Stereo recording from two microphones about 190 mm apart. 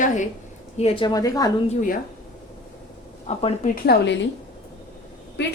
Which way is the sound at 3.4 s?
30° left (ahead or behind).